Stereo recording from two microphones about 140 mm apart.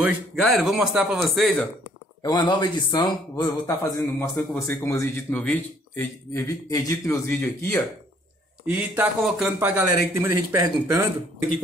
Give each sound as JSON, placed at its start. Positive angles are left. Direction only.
{"t": 0.4, "sound": "speech", "side_deg": 0}
{"t": 0.7, "sound": "a man's voice", "side_deg": -10}
{"t": 1.3, "sound": "speech", "side_deg": 5}
{"t": 2.2, "sound": "speech", "side_deg": 30}
{"t": 8.6, "sound": "a man's voice", "side_deg": -5}